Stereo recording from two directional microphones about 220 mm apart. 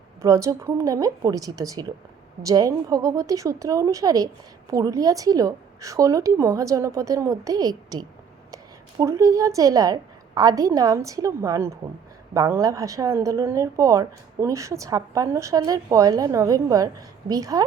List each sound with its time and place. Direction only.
0.2 s a woman's voice: 15° right (ahead or behind)